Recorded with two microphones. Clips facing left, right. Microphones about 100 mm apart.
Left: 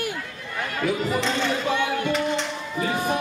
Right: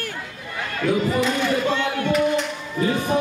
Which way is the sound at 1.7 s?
15° left (ahead or behind).